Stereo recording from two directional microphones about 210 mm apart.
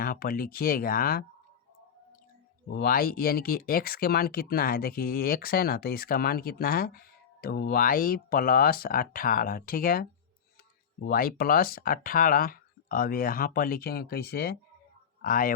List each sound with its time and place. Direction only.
0.0 s speech: 45° left (ahead or behind)
2.6 s speech: 45° left (ahead or behind)